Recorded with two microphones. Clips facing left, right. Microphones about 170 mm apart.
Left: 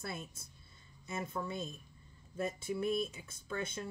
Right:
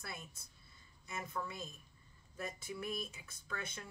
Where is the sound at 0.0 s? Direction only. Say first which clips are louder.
Left 6 dB; 25° left (ahead or behind).